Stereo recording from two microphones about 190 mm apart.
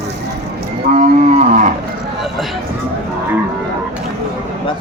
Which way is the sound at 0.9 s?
40° right (ahead or behind).